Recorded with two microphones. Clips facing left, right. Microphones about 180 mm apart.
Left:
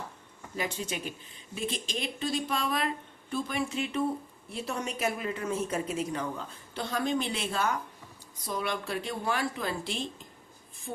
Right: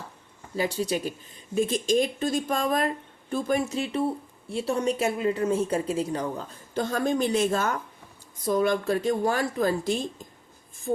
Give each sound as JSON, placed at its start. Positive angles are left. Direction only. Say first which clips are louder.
{"t": 0.5, "sound": "a woman's voice", "louder": "right 8 dB", "side_deg": -35}